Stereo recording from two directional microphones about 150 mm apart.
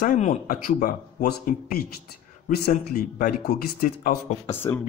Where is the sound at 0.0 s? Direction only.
60° left (ahead or behind); by 2.7 s 90° left.